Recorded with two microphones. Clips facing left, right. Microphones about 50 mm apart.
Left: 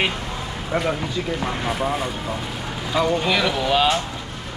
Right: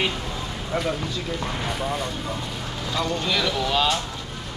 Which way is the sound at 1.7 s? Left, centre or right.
Centre.